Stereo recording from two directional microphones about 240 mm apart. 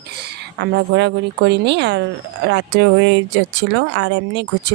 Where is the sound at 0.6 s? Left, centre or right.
Right.